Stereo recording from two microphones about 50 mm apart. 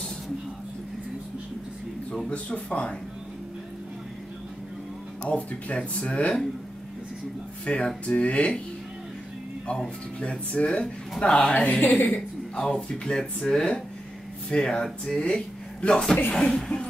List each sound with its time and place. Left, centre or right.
2.2 s speech: left
5.3 s speech: left
7.6 s speech: left
10.5 s speech: left
11.5 s a woman's voice: left
12.1 s speech: centre